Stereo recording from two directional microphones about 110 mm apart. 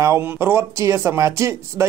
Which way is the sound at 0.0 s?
25° right (ahead or behind).